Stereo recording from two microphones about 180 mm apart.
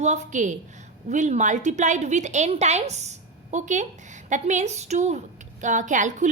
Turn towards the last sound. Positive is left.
turn(degrees=-45)  # may be behind; listen again after turning